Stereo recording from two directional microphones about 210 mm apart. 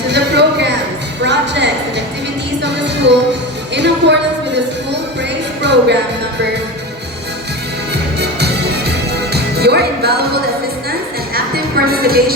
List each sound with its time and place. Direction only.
0.1 s a woman's voice: 55° right (ahead or behind)
8.2 s music: 50° right (ahead or behind)
11.3 s music: 45° right (ahead or behind)